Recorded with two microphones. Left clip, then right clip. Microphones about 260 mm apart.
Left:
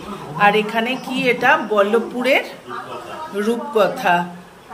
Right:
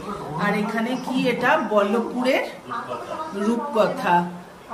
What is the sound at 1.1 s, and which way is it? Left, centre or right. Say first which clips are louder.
A woman's voice: left 5 dB; centre.